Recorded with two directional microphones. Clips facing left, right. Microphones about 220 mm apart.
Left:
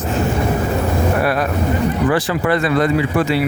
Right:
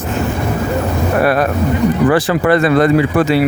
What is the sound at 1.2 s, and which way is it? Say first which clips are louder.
Speech: right 4 dB; 60° right (ahead or behind).